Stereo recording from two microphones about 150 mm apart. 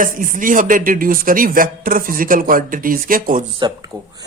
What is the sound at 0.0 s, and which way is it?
Speech, 65° right (ahead or behind).